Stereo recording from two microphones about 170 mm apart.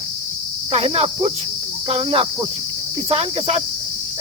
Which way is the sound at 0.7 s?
35° right (ahead or behind).